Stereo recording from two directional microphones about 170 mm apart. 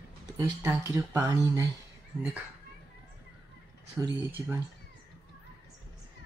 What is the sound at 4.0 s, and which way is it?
Speech, centre (ahead or behind).